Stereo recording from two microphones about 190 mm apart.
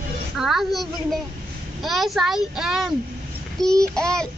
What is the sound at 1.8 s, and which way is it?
Child singing, centre (ahead or behind).